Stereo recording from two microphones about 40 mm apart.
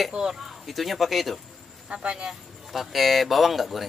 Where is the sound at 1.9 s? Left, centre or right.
Right.